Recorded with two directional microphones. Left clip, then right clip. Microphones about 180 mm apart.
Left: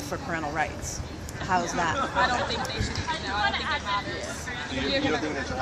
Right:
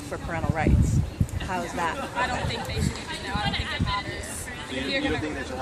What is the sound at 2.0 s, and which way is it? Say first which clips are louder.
Speech: left 3 dB; 10° right (ahead or behind).